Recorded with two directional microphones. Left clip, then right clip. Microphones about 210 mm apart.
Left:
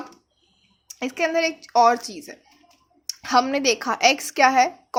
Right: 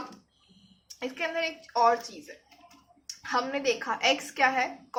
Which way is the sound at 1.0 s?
50° left (ahead or behind).